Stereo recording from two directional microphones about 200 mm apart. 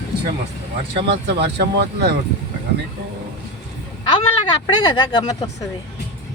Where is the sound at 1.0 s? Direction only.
55° right (ahead or behind).